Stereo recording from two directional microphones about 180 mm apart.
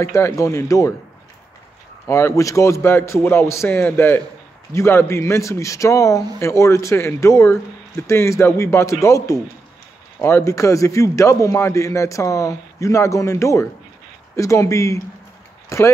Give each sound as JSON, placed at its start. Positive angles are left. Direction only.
{"t": 0.0, "sound": "a man's voice", "side_deg": 15}
{"t": 2.0, "sound": "a man's voice", "side_deg": 15}